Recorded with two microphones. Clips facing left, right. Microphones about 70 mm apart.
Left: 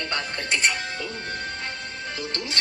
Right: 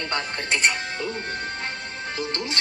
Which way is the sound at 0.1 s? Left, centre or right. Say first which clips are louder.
Right 2 dB; right.